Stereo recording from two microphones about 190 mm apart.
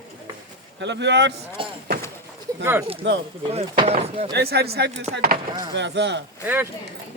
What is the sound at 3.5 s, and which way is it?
Speech, 35° right (ahead or behind).